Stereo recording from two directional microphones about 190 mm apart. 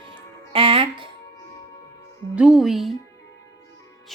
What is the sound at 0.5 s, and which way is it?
Music, 30° right (ahead or behind).